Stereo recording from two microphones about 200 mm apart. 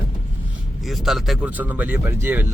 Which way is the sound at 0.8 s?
Centre (ahead or behind).